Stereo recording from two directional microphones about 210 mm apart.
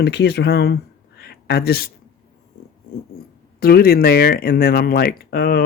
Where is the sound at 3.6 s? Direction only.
45° left (ahead or behind).